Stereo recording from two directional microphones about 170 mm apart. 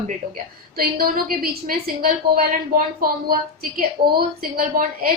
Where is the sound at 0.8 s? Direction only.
60° right (ahead or behind).